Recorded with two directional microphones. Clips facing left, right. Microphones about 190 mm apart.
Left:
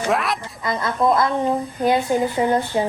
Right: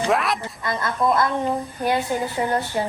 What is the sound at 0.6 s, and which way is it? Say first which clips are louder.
A woman's voice: left 3 dB; 25° left (ahead or behind).